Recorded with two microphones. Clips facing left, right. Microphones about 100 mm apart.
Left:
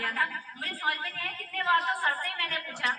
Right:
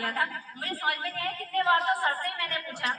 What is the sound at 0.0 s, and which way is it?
A woman's voice, 5° right (ahead or behind).